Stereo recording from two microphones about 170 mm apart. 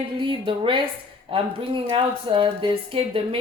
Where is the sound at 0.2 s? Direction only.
30° right (ahead or behind).